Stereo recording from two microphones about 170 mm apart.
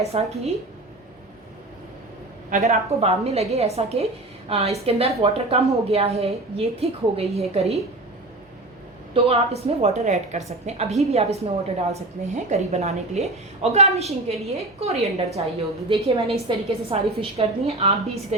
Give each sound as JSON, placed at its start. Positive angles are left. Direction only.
{"t": 0.0, "sound": "a woman's voice", "side_deg": -35}
{"t": 2.5, "sound": "a woman's voice", "side_deg": -45}
{"t": 9.1, "sound": "a woman's voice", "side_deg": -35}